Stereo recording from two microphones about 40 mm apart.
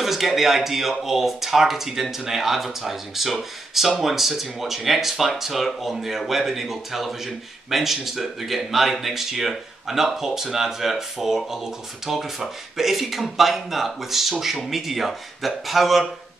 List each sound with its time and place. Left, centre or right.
0.0 s a man's voice: centre